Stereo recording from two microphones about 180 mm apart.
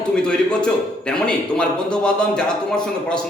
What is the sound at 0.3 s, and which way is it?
A man's voice, 5° left (ahead or behind).